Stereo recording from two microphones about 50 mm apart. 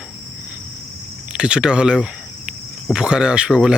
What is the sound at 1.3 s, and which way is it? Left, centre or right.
Speech, centre.